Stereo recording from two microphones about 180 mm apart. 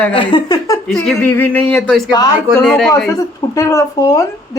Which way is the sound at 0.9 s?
Centre (ahead or behind).